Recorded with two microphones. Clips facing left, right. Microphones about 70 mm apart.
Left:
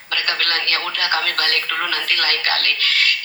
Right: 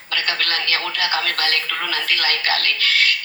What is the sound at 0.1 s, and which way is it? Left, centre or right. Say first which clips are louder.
Radio: left 1 dB; left.